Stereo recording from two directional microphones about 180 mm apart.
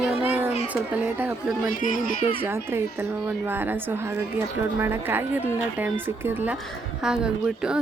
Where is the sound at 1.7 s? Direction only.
50° left (ahead or behind).